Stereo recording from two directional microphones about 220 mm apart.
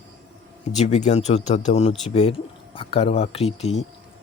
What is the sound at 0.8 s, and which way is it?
Speech, 30° left (ahead or behind).